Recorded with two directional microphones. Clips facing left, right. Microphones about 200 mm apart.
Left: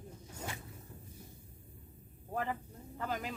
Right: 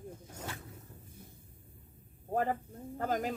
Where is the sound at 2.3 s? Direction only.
45° right (ahead or behind).